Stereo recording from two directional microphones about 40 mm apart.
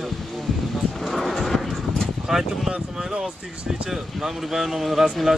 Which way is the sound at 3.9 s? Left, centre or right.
Centre.